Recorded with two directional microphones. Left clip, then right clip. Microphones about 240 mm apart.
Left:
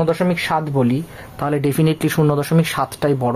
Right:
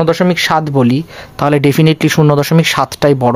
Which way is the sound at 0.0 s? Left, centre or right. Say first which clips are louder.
Right 7 dB; right.